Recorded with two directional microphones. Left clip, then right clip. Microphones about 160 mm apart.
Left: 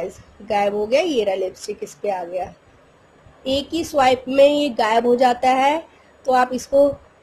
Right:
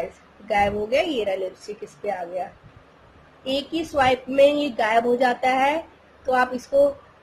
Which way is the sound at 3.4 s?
45° left (ahead or behind).